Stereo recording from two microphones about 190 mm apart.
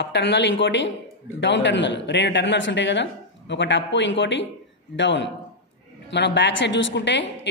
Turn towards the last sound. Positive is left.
turn(degrees=70)  # may be behind; listen again after turning